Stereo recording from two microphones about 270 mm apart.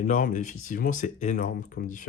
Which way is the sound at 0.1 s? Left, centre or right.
Left.